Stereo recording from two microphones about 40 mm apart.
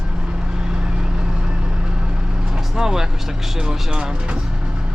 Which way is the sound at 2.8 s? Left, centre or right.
Centre.